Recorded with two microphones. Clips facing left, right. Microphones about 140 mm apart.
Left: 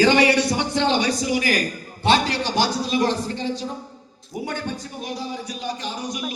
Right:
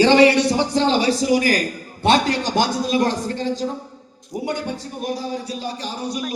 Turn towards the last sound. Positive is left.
turn(degrees=-35)  # may be behind; listen again after turning